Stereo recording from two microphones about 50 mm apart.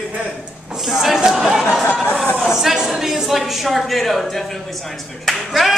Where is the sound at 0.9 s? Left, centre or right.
Centre.